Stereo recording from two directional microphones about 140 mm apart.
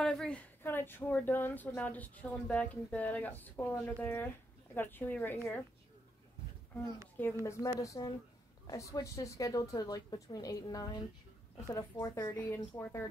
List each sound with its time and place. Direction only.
0.0 s speech: 5° left (ahead or behind)
7.4 s a woman's voice: 20° left (ahead or behind)